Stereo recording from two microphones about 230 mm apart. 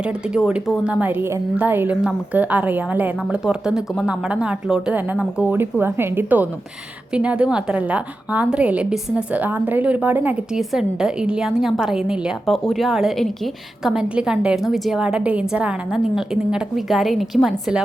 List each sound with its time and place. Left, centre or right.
0.0 s a woman's voice: centre